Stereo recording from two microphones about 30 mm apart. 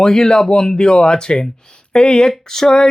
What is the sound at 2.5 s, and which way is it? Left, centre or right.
Speech, centre.